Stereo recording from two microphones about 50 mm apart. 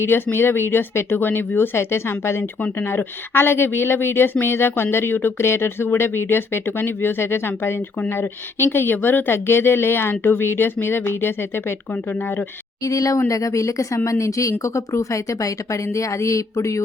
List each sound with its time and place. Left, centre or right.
0.0 s a woman's voice: left
2.7 s a woman's voice: left
5.4 s a woman's voice: left
12.8 s speech: left